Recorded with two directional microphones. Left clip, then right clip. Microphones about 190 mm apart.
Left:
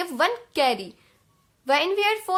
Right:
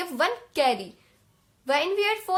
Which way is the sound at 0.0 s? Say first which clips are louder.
Left 2 dB; 25° left (ahead or behind).